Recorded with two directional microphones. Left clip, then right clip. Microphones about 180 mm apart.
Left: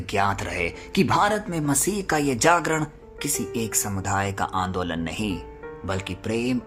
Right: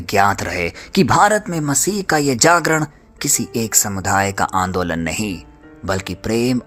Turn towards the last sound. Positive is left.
turn(degrees=-35)  # may be behind; listen again after turning